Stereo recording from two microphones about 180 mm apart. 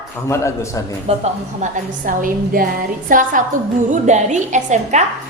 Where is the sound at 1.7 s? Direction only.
50° right (ahead or behind).